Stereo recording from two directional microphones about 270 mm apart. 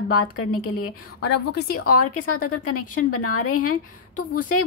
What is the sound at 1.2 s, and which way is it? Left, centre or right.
Speech, left.